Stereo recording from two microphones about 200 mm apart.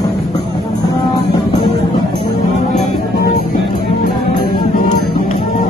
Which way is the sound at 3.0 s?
50° left (ahead or behind).